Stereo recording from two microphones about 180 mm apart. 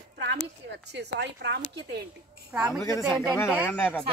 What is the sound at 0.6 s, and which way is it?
Speech, 70° right (ahead or behind).